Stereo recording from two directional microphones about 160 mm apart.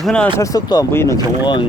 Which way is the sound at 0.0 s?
5° left (ahead or behind).